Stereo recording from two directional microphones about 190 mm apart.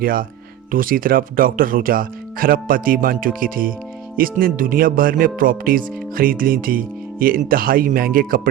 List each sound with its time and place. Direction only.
0.0 s speech: 50° right (ahead or behind)